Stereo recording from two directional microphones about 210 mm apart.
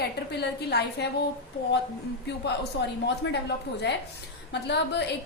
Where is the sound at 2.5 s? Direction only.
55° left (ahead or behind).